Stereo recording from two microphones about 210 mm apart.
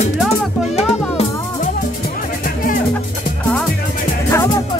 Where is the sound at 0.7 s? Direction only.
30° left (ahead or behind).